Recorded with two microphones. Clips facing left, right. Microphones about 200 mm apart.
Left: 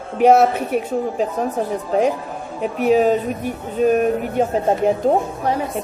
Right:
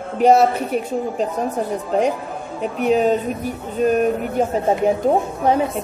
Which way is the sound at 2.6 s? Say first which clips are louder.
Left 2 dB; 5° left (ahead or behind).